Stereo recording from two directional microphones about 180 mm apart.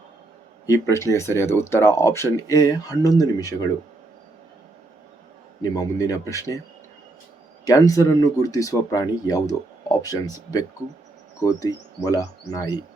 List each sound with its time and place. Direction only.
0.7 s speech: 15° left (ahead or behind)
5.7 s speech: 20° left (ahead or behind)
7.6 s speech: 20° left (ahead or behind)